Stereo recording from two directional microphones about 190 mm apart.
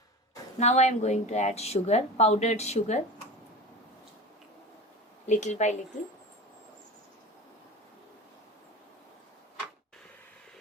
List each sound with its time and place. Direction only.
0.6 s speech: 35° left (ahead or behind)
5.2 s speech: 40° left (ahead or behind)